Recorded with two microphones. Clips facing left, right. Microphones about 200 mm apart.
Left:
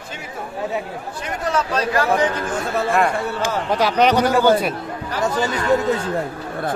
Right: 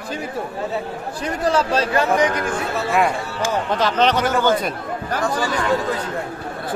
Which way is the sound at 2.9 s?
Centre (ahead or behind).